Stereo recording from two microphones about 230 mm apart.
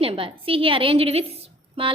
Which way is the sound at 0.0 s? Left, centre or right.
Right.